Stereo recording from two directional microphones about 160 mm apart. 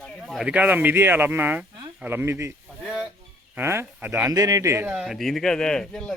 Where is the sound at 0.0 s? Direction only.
Centre (ahead or behind).